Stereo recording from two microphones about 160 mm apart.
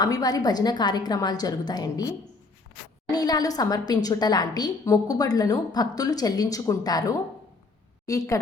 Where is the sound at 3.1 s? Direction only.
25° left (ahead or behind).